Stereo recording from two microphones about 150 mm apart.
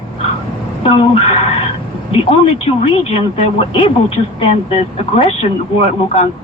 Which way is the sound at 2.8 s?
40° left (ahead or behind).